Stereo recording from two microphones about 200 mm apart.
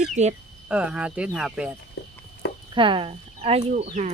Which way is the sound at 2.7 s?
25° right (ahead or behind).